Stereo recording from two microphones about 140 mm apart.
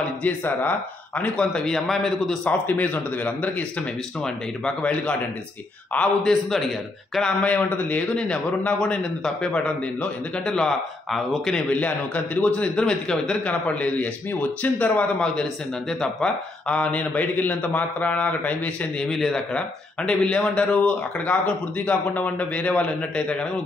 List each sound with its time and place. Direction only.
0.2 s a man's voice: 10° left (ahead or behind)
4.6 s a man's voice: 5° left (ahead or behind)